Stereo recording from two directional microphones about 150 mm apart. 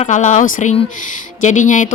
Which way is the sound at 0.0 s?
55° left (ahead or behind).